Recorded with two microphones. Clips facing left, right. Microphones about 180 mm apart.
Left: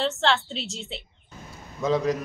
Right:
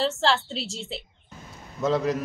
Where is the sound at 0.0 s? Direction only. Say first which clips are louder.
Even; centre (ahead or behind).